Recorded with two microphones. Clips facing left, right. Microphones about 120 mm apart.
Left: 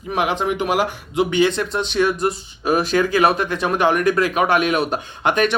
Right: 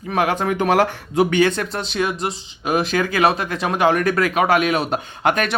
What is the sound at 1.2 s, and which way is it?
Speech, 45° right (ahead or behind).